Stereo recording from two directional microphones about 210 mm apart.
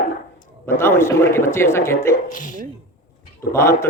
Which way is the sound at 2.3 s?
40° left (ahead or behind).